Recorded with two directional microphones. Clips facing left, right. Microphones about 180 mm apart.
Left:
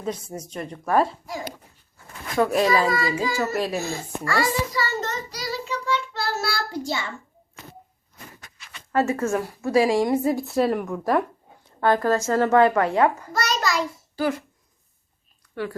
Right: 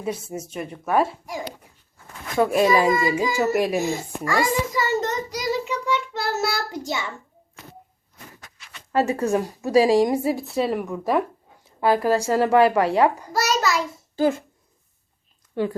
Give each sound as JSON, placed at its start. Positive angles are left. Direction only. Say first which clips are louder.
{"t": 0.0, "sound": "a woman's voice", "louder": "right 2 dB", "side_deg": -5}
{"t": 2.4, "sound": "a sound", "louder": "right 2 dB", "side_deg": -20}
{"t": 8.9, "sound": "a woman's voice", "louder": "right 1 dB", "side_deg": -15}
{"t": 10.2, "sound": "a woman's voice", "louder": "left 1 dB", "side_deg": 0}
{"t": 14.2, "sound": "speech", "louder": "right 4 dB", "side_deg": -25}